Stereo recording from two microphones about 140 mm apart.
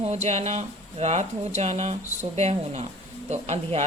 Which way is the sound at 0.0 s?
50° right (ahead or behind).